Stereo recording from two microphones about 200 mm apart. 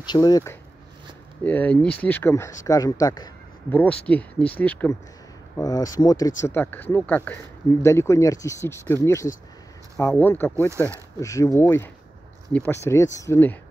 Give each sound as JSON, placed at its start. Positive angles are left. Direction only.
{"t": 0.0, "sound": "speech", "side_deg": 20}
{"t": 3.7, "sound": "speech", "side_deg": 5}
{"t": 5.6, "sound": "speech", "side_deg": 20}
{"t": 10.7, "sound": "speech", "side_deg": -15}
{"t": 11.1, "sound": "speech", "side_deg": 15}